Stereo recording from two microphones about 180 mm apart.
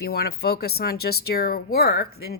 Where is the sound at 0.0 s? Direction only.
60° left (ahead or behind).